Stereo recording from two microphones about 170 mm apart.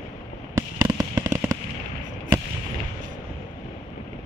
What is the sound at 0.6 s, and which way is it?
Fireworks, 20° right (ahead or behind).